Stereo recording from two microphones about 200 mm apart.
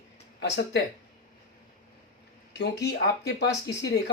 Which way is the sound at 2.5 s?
60° left (ahead or behind).